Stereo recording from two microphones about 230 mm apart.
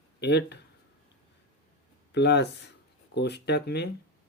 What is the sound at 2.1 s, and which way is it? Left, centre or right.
Speech, left.